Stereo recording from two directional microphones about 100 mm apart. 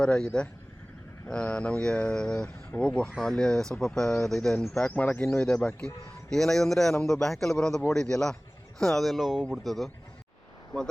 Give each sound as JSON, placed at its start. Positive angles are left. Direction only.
{"t": 0.0, "sound": "speech", "side_deg": 10}